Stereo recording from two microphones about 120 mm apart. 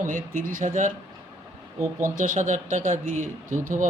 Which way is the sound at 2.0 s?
90° right.